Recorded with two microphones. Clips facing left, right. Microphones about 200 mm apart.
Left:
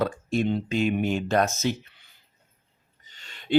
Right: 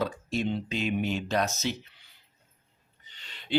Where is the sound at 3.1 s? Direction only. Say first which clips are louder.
Left 6 dB; 45° left (ahead or behind).